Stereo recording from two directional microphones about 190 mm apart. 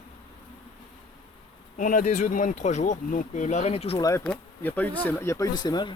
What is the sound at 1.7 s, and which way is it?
Speech, 40° left (ahead or behind).